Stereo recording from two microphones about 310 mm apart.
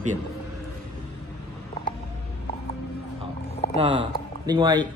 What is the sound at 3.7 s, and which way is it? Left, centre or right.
Speech, centre.